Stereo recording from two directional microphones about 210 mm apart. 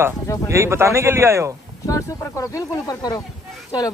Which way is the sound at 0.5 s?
15° right (ahead or behind).